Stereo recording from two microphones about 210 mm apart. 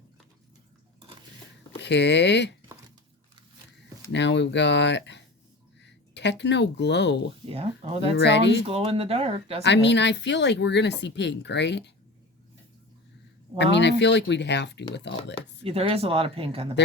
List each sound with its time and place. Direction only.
1.8 s speech: 55° left (ahead or behind)
4.1 s speech: 55° left (ahead or behind)
7.5 s speech: 25° right (ahead or behind)
8.1 s speech: 55° left (ahead or behind)
8.6 s speech: 25° right (ahead or behind)
9.6 s speech: 55° left (ahead or behind)
13.6 s speech: 55° left (ahead or behind)
15.6 s speech: 25° right (ahead or behind)